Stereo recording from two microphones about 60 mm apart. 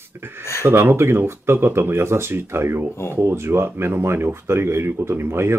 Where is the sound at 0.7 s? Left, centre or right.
Right.